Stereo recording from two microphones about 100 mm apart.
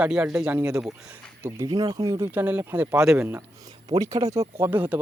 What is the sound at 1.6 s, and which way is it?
Speech, 35° right (ahead or behind).